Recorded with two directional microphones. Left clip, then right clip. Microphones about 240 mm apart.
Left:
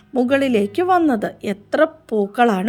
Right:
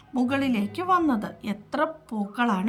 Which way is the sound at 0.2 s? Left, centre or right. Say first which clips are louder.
Left 9 dB; centre.